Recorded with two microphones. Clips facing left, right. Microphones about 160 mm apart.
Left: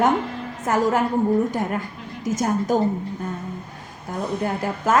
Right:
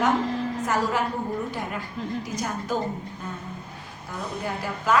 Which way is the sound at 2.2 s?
45° left (ahead or behind).